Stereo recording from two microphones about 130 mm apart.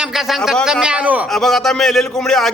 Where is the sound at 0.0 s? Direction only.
Centre (ahead or behind).